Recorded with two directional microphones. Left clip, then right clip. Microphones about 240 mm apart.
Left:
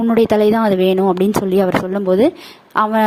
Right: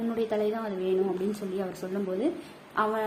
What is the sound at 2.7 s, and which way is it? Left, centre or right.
Speech, left.